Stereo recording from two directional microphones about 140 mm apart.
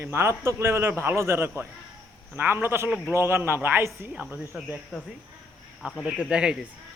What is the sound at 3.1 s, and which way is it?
A man's voice, 20° right (ahead or behind).